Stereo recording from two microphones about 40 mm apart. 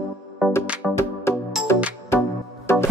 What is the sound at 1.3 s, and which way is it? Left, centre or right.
Music, left.